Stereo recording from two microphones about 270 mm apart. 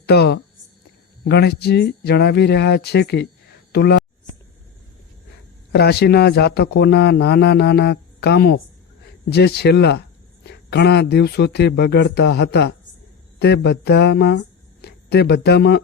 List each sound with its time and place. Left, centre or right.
0.0 s a man's voice: left
5.7 s a man's voice: left